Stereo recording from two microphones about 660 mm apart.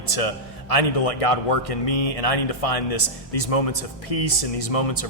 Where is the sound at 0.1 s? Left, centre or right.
Left.